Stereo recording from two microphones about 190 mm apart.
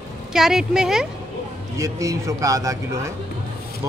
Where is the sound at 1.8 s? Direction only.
15° right (ahead or behind).